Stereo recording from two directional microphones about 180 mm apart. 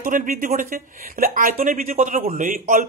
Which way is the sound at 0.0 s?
50° right (ahead or behind).